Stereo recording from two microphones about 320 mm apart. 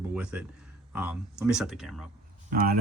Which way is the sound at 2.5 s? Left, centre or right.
Right.